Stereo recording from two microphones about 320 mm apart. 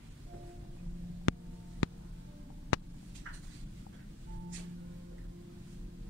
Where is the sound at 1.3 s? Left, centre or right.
Left.